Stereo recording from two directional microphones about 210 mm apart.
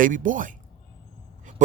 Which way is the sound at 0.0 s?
40° right (ahead or behind).